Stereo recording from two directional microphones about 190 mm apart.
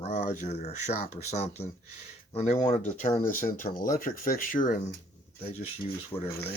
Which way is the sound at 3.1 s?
15° left (ahead or behind).